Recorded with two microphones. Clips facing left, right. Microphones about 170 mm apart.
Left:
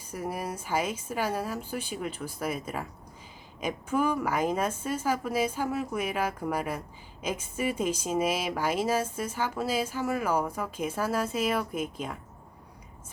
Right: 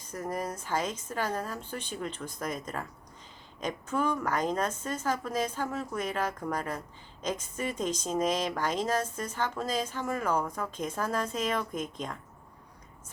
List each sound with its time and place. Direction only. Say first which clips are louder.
0.0 s a woman's voice: even; 10° left (ahead or behind)